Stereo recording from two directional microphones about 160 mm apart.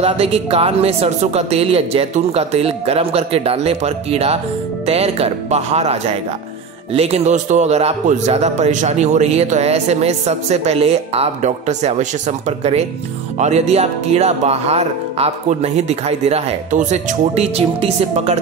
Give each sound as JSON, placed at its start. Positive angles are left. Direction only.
{"t": 0.0, "sound": "a man's voice", "side_deg": -35}